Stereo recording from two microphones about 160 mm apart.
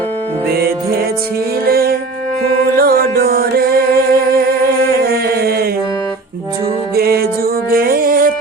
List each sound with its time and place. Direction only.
1.6 s music: 70° right (ahead or behind)
6.9 s music: 75° right (ahead or behind)